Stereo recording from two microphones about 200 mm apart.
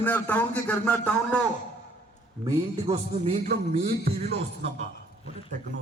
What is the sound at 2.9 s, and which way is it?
A man's voice, 25° right (ahead or behind).